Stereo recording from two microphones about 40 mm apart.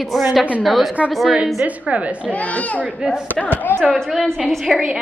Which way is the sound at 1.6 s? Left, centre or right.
Right.